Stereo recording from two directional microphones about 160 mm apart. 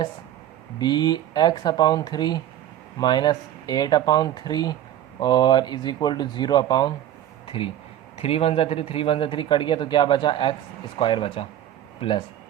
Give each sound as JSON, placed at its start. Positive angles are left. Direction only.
{"t": 0.8, "sound": "speech", "side_deg": 25}
{"t": 7.4, "sound": "a sound", "side_deg": 35}
{"t": 8.2, "sound": "a man's voice", "side_deg": 35}